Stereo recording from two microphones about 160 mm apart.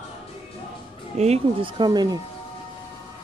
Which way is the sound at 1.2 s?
40° right (ahead or behind).